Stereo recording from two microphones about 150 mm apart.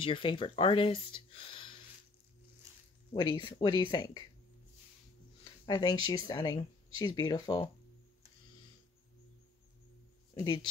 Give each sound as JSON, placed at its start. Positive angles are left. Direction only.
{"t": 0.0, "sound": "speech", "side_deg": 35}
{"t": 3.3, "sound": "speech", "side_deg": 35}
{"t": 5.4, "sound": "speech", "side_deg": 30}
{"t": 10.4, "sound": "speech", "side_deg": 25}